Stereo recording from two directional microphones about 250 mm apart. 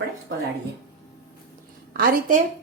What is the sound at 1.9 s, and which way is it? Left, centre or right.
Speech, right.